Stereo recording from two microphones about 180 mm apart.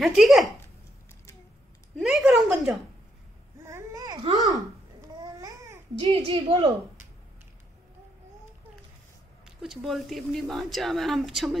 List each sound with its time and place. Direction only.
0.0 s a woman's voice: centre (ahead or behind)
2.0 s a sound: centre (ahead or behind)
3.5 s babbling: 15° right (ahead or behind)
5.9 s a child's voice: 30° right (ahead or behind)
9.6 s a woman's voice: centre (ahead or behind)